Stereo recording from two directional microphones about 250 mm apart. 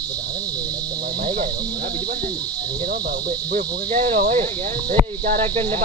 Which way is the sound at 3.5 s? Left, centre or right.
Right.